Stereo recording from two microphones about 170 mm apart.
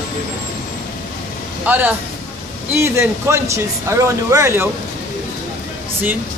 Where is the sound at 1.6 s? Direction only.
10° right (ahead or behind).